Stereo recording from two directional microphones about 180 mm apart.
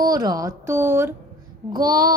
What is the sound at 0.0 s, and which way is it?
A woman's voice, 20° right (ahead or behind).